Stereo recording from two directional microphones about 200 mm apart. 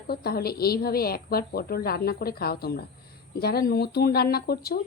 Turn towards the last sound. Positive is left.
turn(degrees=50)  # may be behind; listen again after turning